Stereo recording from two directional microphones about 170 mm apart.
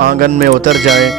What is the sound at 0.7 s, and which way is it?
Speech, centre (ahead or behind).